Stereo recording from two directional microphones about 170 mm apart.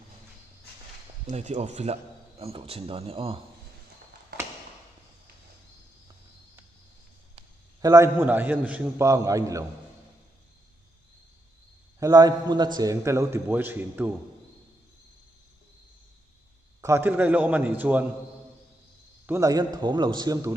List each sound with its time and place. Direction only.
1.3 s speech: 40° right (ahead or behind)
7.8 s a man's voice: 20° right (ahead or behind)
11.9 s a man's voice: 20° right (ahead or behind)
16.8 s a man's voice: 15° right (ahead or behind)
19.2 s a man's voice: 15° right (ahead or behind)